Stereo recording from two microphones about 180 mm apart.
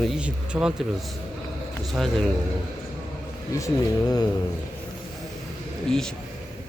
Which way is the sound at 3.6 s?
20° left (ahead or behind).